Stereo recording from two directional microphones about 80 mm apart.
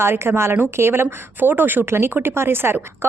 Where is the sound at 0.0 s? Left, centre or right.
Right.